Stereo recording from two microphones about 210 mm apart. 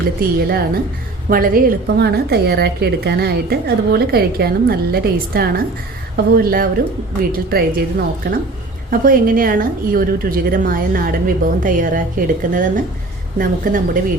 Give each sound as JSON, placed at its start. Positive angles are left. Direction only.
{"t": 0.2, "sound": "a woman's voice", "side_deg": -45}